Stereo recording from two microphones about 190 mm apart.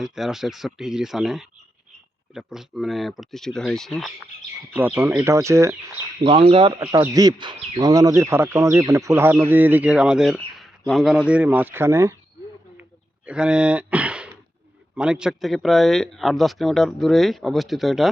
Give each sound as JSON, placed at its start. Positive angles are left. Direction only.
{"t": 0.0, "sound": "speech", "side_deg": 0}
{"t": 4.7, "sound": "speech", "side_deg": -10}
{"t": 6.2, "sound": "speech", "side_deg": -30}
{"t": 13.2, "sound": "speech", "side_deg": -5}